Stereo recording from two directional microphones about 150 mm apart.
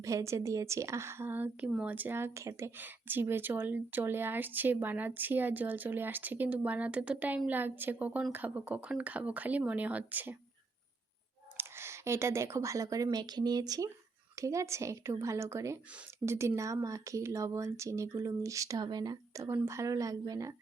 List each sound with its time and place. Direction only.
0.0 s a woman's voice: 20° right (ahead or behind)
11.5 s a woman's voice: 15° right (ahead or behind)